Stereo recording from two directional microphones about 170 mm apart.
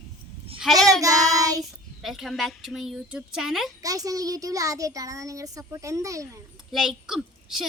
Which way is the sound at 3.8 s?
20° right (ahead or behind).